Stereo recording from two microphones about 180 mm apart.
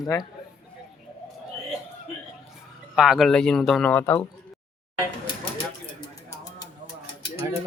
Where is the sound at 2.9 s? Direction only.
5° right (ahead or behind).